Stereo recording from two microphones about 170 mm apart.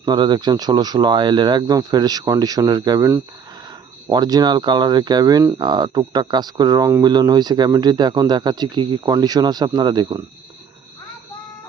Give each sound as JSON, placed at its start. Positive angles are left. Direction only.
{"t": 0.0, "sound": "speech", "side_deg": -25}